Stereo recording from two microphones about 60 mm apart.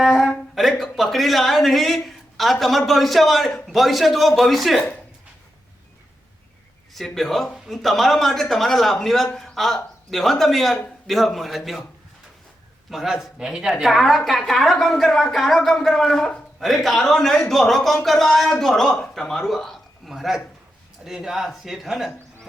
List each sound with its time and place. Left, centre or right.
0.0 s a sound: centre
0.5 s a man's voice: centre
6.9 s a man's voice: centre
12.9 s a man's voice: centre